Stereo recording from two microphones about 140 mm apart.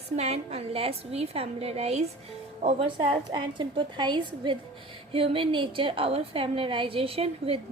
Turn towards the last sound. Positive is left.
turn(degrees=-45)  # may be behind; listen again after turning